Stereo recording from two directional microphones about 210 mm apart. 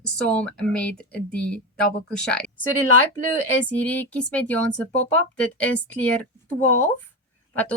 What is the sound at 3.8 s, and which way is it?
Speech, 5° left (ahead or behind).